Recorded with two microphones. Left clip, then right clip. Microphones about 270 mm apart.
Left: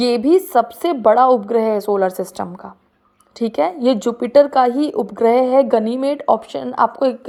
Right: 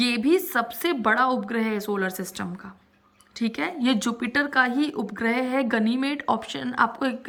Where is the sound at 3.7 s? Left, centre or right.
Centre.